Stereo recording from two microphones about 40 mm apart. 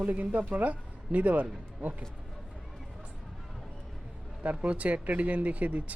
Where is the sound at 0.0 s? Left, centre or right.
Right.